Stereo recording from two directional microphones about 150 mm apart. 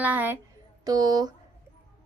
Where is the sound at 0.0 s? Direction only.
10° right (ahead or behind).